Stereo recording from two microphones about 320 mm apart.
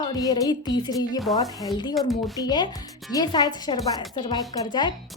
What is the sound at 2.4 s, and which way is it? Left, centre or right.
A woman's voice, centre.